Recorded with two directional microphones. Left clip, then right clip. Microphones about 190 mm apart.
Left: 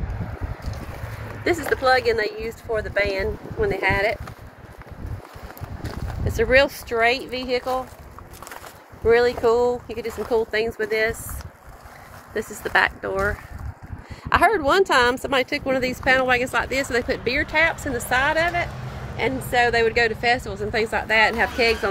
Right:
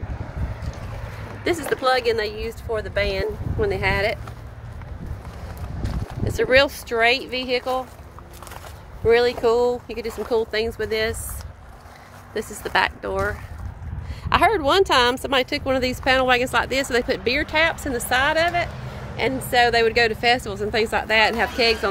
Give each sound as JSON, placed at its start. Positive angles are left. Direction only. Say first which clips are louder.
{"t": 1.4, "sound": "speech", "louder": "left 1 dB", "side_deg": 5}
{"t": 6.2, "sound": "speech", "louder": "even", "side_deg": -10}
{"t": 9.0, "sound": "speech", "louder": "even", "side_deg": 0}
{"t": 12.4, "sound": "speech", "louder": "left 1 dB", "side_deg": 5}